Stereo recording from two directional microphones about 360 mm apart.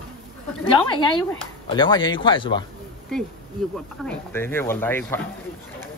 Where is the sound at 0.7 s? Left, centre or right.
Centre.